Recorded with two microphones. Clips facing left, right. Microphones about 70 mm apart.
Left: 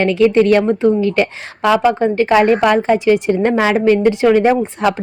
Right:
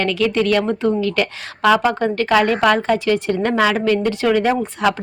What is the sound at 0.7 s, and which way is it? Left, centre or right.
Speech, centre.